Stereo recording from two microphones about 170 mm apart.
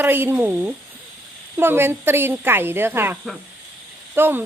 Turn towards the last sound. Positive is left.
turn(degrees=-10)  # may be behind; listen again after turning